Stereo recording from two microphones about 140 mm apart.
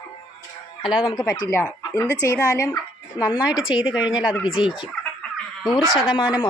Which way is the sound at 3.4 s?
5° right (ahead or behind).